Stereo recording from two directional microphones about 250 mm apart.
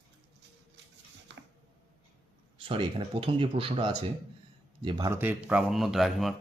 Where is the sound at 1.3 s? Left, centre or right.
Right.